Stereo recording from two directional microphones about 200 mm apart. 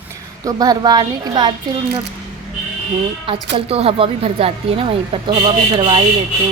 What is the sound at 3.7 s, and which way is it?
Speech, 30° right (ahead or behind).